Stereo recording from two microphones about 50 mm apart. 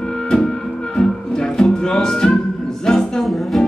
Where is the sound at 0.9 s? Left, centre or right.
Centre.